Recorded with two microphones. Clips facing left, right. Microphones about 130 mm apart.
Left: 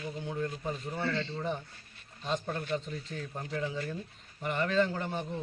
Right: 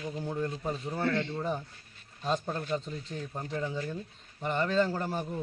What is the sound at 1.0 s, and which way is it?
Speech, 55° right (ahead or behind).